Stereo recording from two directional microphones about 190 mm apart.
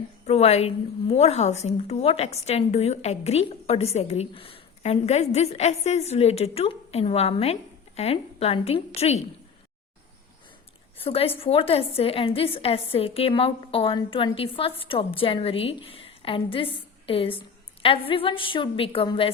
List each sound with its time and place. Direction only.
0.3 s a woman's voice: 35° left (ahead or behind)
11.0 s a woman's voice: 30° left (ahead or behind)